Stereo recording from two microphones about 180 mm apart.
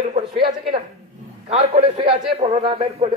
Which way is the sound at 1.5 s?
35° right (ahead or behind).